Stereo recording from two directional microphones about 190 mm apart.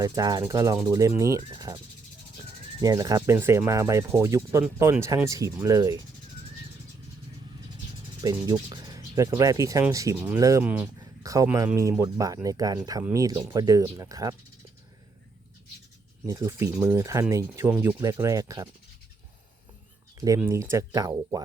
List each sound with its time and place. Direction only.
0.0 s speech: 20° right (ahead or behind)
2.8 s speech: 20° right (ahead or behind)
8.2 s speech: 20° right (ahead or behind)
16.2 s speech: 15° right (ahead or behind)
20.1 s speech: 20° right (ahead or behind)